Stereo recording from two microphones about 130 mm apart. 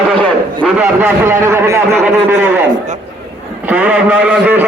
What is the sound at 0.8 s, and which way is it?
A man's voice, 15° right (ahead or behind).